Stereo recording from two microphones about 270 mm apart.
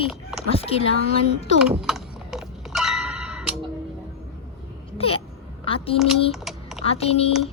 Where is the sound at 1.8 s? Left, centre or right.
Centre.